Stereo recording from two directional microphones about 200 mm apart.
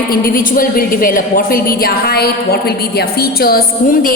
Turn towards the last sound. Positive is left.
turn(degrees=45)  # may be behind; listen again after turning